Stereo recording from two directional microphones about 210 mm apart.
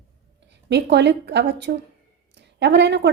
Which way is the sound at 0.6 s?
55° right (ahead or behind).